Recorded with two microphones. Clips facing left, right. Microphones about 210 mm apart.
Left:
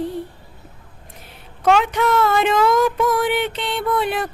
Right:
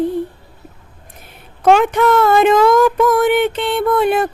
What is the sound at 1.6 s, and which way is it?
Speech, 50° right (ahead or behind).